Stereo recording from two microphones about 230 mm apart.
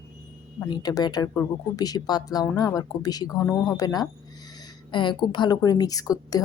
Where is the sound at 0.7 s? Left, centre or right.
Centre.